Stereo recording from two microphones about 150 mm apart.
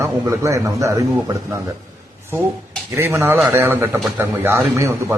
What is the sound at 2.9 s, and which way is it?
A man's voice, 15° right (ahead or behind).